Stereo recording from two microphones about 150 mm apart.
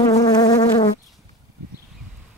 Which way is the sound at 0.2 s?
25° left (ahead or behind).